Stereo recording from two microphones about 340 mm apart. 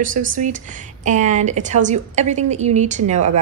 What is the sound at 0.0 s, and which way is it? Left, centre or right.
Speech, right.